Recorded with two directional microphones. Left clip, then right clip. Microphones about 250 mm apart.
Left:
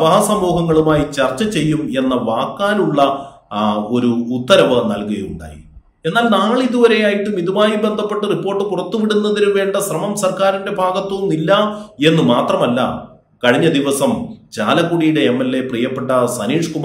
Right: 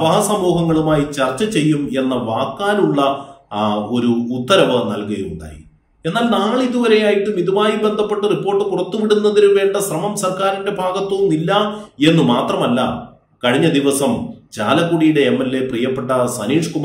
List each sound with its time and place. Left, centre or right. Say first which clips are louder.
0.0 s a man's voice: left 2 dB; centre
13.4 s a man's voice: left 2 dB; centre